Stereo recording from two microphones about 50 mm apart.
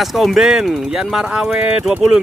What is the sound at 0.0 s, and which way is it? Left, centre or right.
Speech, centre.